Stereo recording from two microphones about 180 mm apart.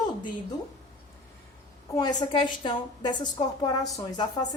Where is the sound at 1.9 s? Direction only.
20° left (ahead or behind).